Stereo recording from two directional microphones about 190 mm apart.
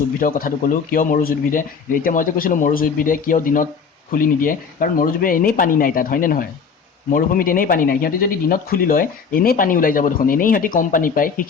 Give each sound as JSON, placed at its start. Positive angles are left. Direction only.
{"t": 0.2, "sound": "speech", "side_deg": 50}